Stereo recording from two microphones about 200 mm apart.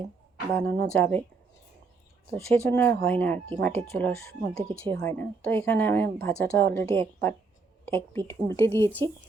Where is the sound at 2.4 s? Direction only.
10° left (ahead or behind).